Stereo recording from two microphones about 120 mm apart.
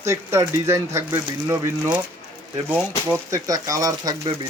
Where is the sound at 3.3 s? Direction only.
30° right (ahead or behind).